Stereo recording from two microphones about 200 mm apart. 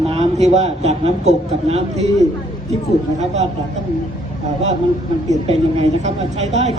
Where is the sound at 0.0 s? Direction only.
30° right (ahead or behind).